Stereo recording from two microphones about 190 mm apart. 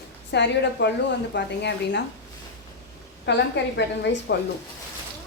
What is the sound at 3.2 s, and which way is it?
A woman's voice, 65° left (ahead or behind).